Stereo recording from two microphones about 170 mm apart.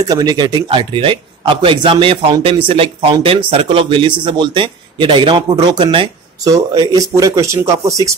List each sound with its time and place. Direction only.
0.0 s a man's voice: 20° right (ahead or behind)